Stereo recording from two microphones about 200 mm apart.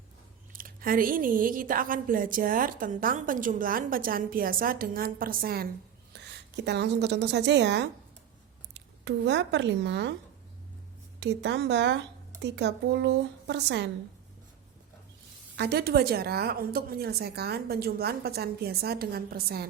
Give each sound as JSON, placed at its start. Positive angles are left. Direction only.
{"t": 0.5, "sound": "a woman's voice", "side_deg": -45}
{"t": 9.0, "sound": "speech", "side_deg": -60}
{"t": 11.2, "sound": "speech", "side_deg": -60}
{"t": 15.5, "sound": "a woman's voice", "side_deg": -55}